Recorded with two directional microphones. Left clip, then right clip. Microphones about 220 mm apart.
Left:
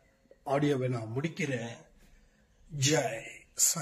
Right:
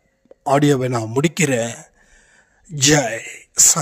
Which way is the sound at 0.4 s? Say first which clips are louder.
Right 13 dB; 50° right (ahead or behind).